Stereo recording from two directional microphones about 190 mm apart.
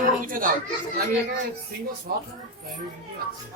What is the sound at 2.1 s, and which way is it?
Speech, 50° right (ahead or behind).